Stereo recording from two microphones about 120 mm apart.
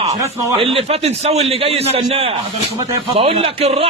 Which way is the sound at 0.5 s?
50° right (ahead or behind).